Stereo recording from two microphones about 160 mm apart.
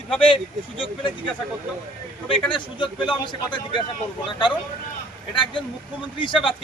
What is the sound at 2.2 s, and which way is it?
Speech, 30° left (ahead or behind).